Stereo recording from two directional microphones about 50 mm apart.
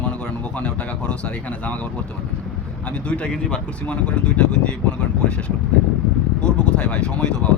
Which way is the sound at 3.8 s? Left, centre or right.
Left.